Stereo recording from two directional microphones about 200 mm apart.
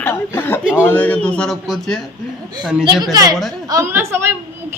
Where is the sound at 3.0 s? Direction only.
20° right (ahead or behind).